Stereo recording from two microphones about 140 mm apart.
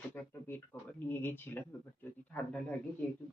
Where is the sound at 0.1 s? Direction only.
15° left (ahead or behind).